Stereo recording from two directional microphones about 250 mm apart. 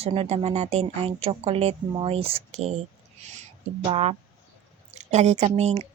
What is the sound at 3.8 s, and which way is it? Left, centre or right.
A woman's voice, right.